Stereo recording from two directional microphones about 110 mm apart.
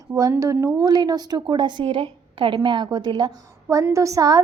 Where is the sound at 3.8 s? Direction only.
30° right (ahead or behind).